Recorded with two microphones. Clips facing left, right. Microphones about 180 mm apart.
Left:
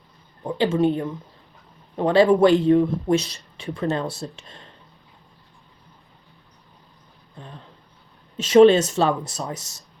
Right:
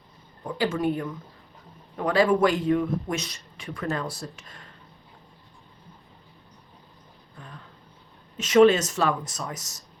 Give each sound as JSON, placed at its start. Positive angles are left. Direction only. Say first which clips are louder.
{"t": 0.4, "sound": "speech", "louder": "left 5 dB", "side_deg": 25}
{"t": 7.3, "sound": "a sound", "louder": "left 4 dB", "side_deg": 25}
{"t": 8.4, "sound": "speech", "louder": "left 4 dB", "side_deg": 30}